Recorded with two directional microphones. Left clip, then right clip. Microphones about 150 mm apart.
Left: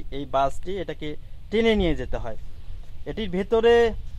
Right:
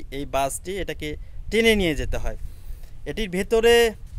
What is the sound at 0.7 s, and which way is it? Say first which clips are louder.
Speech: right 1 dB; 40° right (ahead or behind).